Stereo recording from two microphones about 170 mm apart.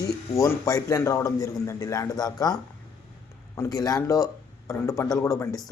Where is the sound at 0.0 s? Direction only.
20° left (ahead or behind).